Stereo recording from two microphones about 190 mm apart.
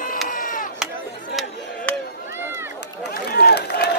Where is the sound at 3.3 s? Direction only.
60° left (ahead or behind).